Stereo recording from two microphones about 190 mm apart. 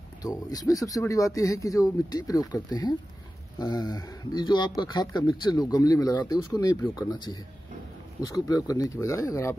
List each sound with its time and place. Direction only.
0.2 s speech: 20° left (ahead or behind)
8.2 s speech: 20° left (ahead or behind)